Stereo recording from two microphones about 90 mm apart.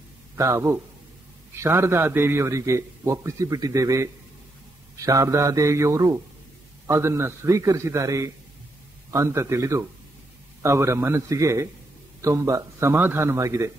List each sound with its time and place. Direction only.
0.4 s a man's voice: 35° right (ahead or behind)
12.9 s a man's voice: 25° right (ahead or behind)